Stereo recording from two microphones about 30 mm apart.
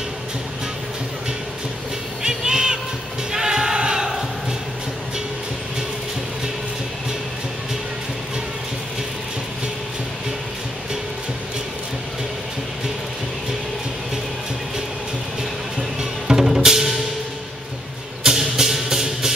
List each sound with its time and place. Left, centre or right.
2.2 s crowd: right
3.3 s choir: right
16.0 s music: centre
18.2 s music: centre